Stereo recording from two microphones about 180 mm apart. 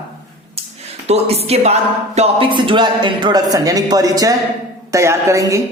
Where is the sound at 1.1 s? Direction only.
35° right (ahead or behind); by 5.6 s 15° right (ahead or behind).